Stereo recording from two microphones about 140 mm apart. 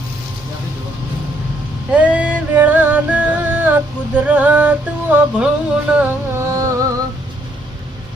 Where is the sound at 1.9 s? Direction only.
10° right (ahead or behind).